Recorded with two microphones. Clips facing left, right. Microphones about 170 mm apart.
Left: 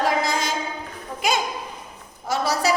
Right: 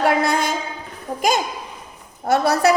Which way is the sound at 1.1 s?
45° right (ahead or behind).